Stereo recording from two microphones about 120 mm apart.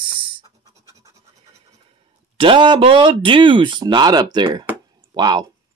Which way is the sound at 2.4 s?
45° right (ahead or behind).